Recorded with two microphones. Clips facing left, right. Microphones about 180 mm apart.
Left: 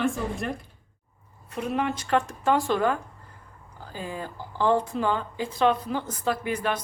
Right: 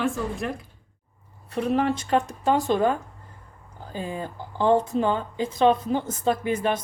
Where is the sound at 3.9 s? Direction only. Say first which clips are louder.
Right 3 dB; 25° right (ahead or behind).